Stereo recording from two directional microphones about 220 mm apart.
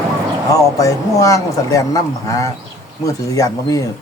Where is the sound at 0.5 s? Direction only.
15° left (ahead or behind).